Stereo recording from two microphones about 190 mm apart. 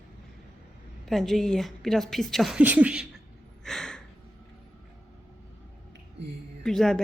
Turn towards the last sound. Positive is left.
turn(degrees=5)  # may be behind; listen again after turning